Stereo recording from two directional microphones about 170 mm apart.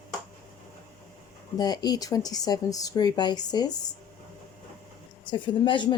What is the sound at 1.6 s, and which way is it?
A woman's voice, 25° left (ahead or behind).